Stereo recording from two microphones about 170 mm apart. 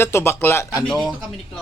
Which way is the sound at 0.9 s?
Centre (ahead or behind).